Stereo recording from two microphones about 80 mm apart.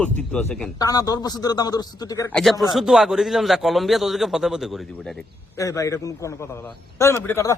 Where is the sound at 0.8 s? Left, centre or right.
Left.